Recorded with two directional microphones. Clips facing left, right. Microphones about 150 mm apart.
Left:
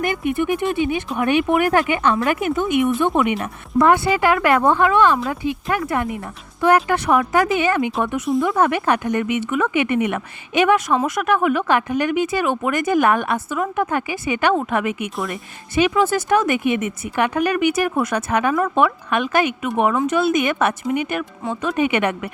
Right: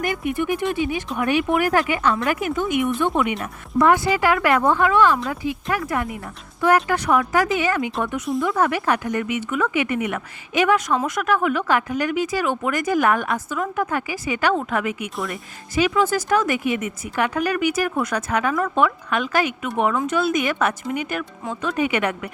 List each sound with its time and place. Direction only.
0.0 s speech: 25° left (ahead or behind)